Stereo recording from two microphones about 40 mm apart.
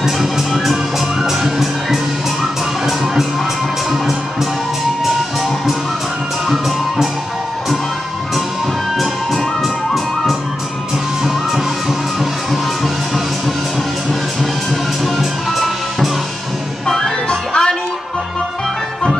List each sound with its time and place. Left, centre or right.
0.0 s music: centre
9.3 s music: centre
15.1 s music: centre
16.8 s music: centre